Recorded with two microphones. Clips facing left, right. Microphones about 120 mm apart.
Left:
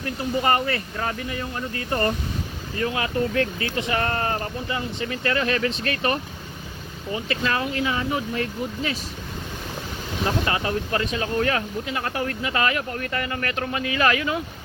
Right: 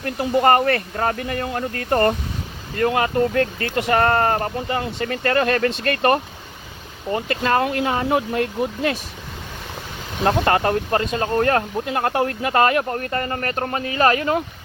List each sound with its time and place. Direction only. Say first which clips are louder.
0.0 s speech: right 6 dB; 55° right (ahead or behind)
4.0 s speech: right 7 dB; 40° right (ahead or behind)
10.2 s speech: right 7 dB; 50° right (ahead or behind)